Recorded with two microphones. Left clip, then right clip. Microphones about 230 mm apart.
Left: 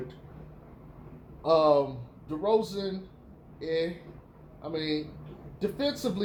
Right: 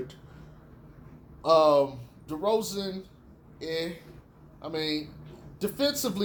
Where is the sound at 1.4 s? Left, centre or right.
Right.